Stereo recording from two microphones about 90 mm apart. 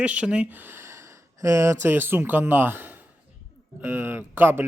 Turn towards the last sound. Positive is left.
turn(degrees=-20)  # may be behind; listen again after turning